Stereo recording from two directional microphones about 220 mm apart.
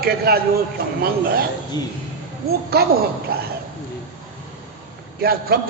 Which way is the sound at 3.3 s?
45° right (ahead or behind).